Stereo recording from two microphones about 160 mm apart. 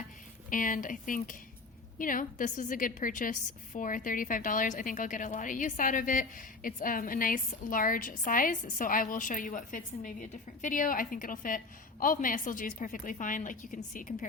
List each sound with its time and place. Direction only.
0.5 s a woman's voice: 55° left (ahead or behind)